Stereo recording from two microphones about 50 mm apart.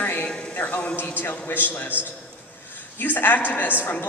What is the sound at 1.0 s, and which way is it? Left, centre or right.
Speech, left.